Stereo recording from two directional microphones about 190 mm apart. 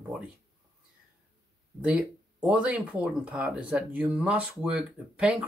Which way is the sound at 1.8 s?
5° right (ahead or behind).